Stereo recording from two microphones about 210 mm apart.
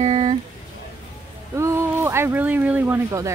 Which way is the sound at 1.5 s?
15° right (ahead or behind).